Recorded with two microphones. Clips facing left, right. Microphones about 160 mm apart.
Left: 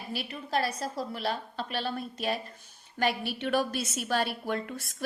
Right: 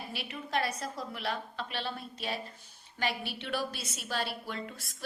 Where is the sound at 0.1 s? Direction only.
40° left (ahead or behind).